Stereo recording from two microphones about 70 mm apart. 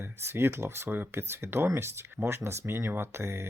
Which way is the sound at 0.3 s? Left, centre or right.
Right.